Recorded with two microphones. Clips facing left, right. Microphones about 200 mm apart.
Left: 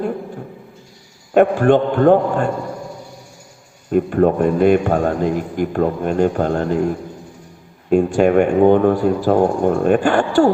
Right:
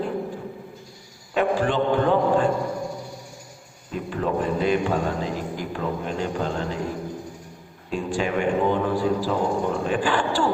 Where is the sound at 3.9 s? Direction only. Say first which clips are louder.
Left 11 dB; 55° left (ahead or behind).